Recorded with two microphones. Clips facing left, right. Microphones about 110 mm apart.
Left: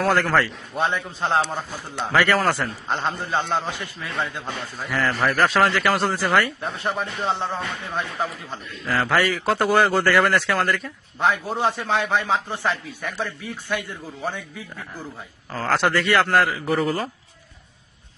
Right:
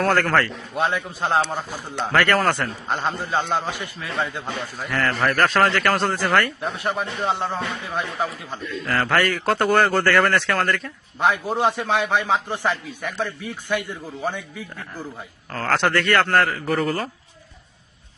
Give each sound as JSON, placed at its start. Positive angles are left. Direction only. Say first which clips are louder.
{"t": 0.0, "sound": "a man's voice", "louder": "even", "side_deg": 0}
{"t": 2.1, "sound": "speech", "louder": "even", "side_deg": 0}
{"t": 3.1, "sound": "a man's voice", "louder": "right 1 dB", "side_deg": -15}
{"t": 4.9, "sound": "speech", "louder": "even", "side_deg": 5}
{"t": 7.2, "sound": "a man's voice", "louder": "right 1 dB", "side_deg": -20}
{"t": 7.4, "sound": "a man's voice", "louder": "right 1 dB", "side_deg": -5}
{"t": 8.9, "sound": "speech", "louder": "even", "side_deg": 0}
{"t": 11.2, "sound": "a man's voice", "louder": "right 1 dB", "side_deg": -15}
{"t": 15.5, "sound": "speech", "louder": "even", "side_deg": 5}